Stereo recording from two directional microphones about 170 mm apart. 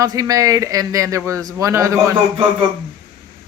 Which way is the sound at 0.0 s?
20° right (ahead or behind).